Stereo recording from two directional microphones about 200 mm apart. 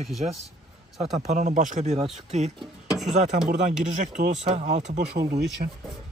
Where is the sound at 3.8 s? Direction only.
40° right (ahead or behind).